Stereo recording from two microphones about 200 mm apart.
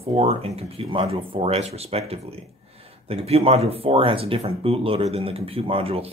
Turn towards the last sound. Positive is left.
turn(degrees=-30)  # may be behind; listen again after turning